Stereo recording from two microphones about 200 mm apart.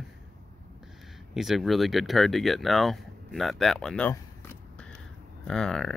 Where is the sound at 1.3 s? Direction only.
Centre (ahead or behind).